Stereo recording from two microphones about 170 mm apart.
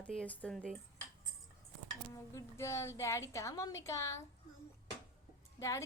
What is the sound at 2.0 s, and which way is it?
A woman's voice, 15° left (ahead or behind).